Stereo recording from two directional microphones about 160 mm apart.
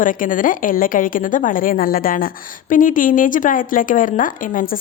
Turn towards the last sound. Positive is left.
turn(degrees=60)  # may be behind; listen again after turning